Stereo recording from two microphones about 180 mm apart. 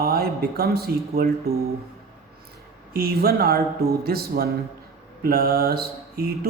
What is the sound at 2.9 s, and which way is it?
A man's voice, 60° right (ahead or behind).